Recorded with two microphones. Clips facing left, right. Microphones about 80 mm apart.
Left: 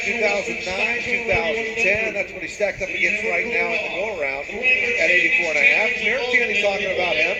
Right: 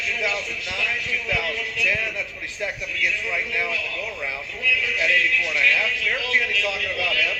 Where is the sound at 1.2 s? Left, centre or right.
Left.